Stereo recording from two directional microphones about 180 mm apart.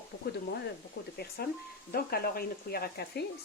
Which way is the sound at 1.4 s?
60° left (ahead or behind).